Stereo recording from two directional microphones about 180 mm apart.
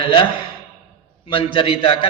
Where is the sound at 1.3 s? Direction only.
30° left (ahead or behind).